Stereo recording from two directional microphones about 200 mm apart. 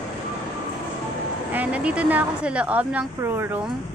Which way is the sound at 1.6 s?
5° right (ahead or behind).